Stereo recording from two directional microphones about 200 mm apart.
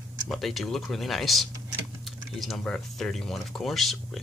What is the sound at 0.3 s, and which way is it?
Speech, centre (ahead or behind).